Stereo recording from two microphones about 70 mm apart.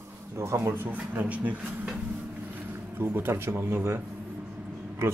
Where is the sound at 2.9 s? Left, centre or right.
Right.